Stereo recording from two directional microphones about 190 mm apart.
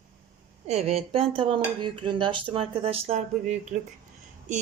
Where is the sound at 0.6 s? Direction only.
35° right (ahead or behind).